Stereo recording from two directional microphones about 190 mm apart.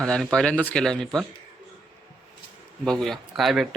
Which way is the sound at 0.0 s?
5° left (ahead or behind).